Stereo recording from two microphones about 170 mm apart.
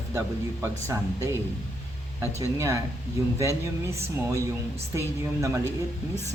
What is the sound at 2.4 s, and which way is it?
Speech, 20° right (ahead or behind).